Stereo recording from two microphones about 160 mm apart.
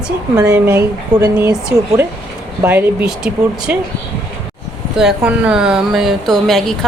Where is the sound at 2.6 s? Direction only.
15° right (ahead or behind).